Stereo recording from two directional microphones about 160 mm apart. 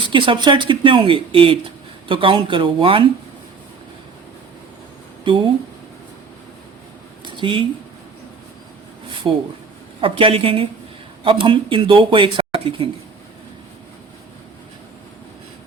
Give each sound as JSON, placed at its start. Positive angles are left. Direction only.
{"t": 0.1, "sound": "speech", "side_deg": -30}
{"t": 5.2, "sound": "speech", "side_deg": -30}
{"t": 7.3, "sound": "a sound", "side_deg": -30}
{"t": 10.0, "sound": "speech", "side_deg": -35}